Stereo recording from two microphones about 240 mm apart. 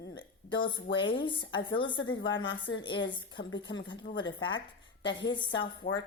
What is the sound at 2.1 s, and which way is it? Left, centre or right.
A woman's voice, left.